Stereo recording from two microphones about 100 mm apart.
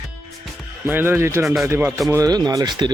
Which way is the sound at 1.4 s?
Centre (ahead or behind).